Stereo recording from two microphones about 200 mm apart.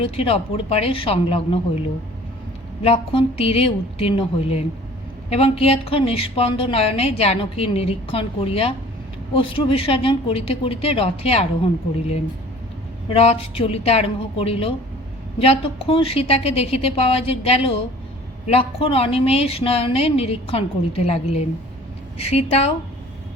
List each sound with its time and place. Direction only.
0.0 s a woman's voice: 30° left (ahead or behind)
2.8 s a woman's voice: 30° left (ahead or behind)
13.1 s a woman's voice: 30° left (ahead or behind)